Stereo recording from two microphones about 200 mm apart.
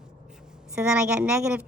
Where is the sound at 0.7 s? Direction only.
5° right (ahead or behind).